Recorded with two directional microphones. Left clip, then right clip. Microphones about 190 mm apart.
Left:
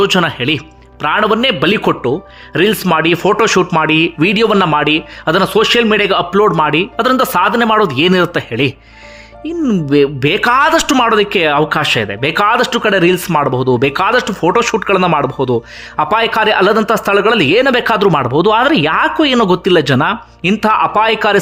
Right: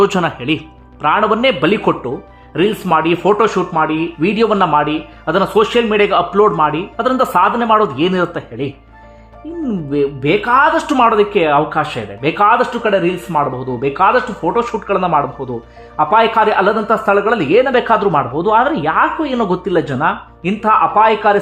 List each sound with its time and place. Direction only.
0.0 s speech: 10° left (ahead or behind); by 10.9 s 35° left (ahead or behind)
10.9 s speech: 20° left (ahead or behind)